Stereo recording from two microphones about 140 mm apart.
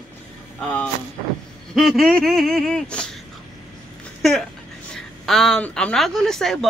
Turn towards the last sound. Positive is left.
turn(degrees=5)  # may be behind; listen again after turning